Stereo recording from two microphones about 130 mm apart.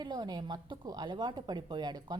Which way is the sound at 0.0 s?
35° right (ahead or behind).